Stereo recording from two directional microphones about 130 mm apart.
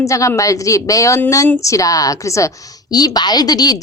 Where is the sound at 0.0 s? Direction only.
25° left (ahead or behind).